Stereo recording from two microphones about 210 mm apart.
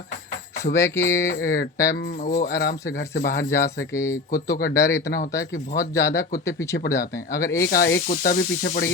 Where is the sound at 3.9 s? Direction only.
15° left (ahead or behind).